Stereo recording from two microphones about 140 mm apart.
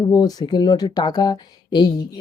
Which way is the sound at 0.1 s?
30° left (ahead or behind).